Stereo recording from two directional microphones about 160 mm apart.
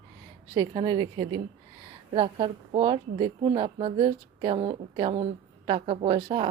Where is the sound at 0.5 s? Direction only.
20° right (ahead or behind).